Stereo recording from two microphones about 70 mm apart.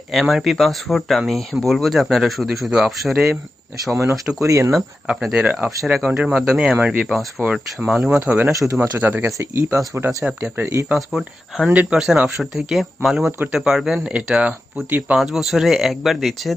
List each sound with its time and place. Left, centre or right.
0.1 s speech: centre
3.9 s speech: right
4.7 s speech: centre
8.2 s speech: right
8.5 s speech: right
9.0 s speech: right
9.2 s speech: right
10.4 s speech: right
10.9 s speech: centre
11.7 s speech: centre
15.1 s speech: centre